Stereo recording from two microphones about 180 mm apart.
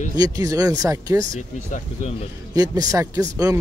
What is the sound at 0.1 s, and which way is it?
Speech, 20° right (ahead or behind).